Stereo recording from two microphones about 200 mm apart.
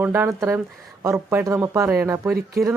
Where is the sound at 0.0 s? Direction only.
10° right (ahead or behind).